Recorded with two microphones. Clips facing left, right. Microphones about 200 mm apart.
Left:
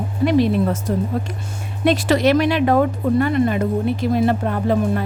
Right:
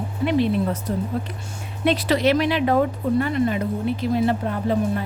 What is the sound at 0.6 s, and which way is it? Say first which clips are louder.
Speech: left 4 dB; 90° left.